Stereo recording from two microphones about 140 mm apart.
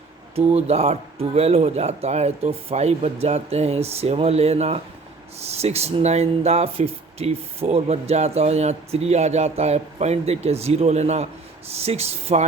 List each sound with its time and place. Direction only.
0.3 s speech: 50° right (ahead or behind)